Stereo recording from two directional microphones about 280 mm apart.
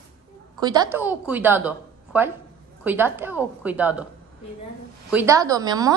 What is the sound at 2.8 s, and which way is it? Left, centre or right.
A woman's voice, centre.